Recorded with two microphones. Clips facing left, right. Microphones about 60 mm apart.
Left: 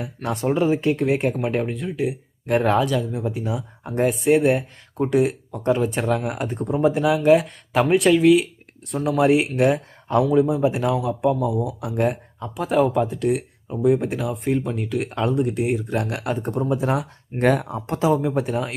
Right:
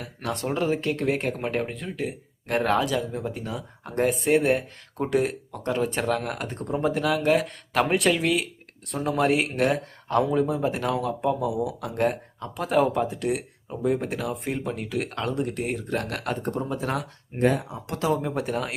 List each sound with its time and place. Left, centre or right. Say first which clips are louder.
0.0 s speech: left 5 dB; centre
17.4 s speech: left 4 dB; left
18.1 s speech: left 3 dB; centre